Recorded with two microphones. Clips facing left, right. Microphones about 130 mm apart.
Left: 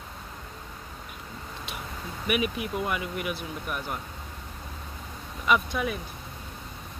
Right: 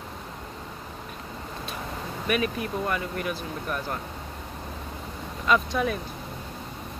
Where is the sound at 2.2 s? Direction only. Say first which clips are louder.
Right 1 dB; 15° left (ahead or behind).